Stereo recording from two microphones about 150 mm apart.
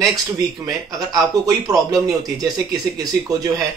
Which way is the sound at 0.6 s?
25° right (ahead or behind).